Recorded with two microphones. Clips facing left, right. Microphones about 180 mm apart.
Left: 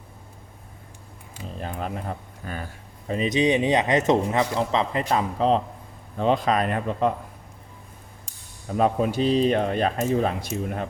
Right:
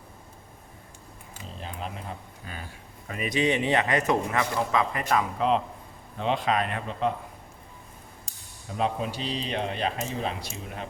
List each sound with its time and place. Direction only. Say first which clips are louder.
1.6 s speech: left 6 dB; 50° left (ahead or behind)
3.1 s a man's voice: left 5 dB; 25° left (ahead or behind); by 7.1 s 45° left (ahead or behind)
8.8 s speech: left 7 dB; 50° left (ahead or behind)